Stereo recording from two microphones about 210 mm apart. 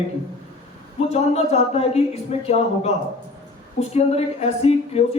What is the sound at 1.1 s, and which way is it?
Speech, 30° left (ahead or behind).